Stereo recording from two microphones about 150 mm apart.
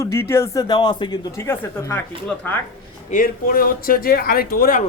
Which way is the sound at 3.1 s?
70° left (ahead or behind).